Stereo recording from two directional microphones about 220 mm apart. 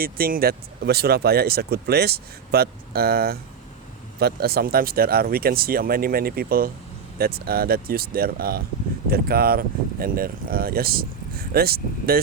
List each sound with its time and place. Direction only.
0.0 s speech: 45° right (ahead or behind)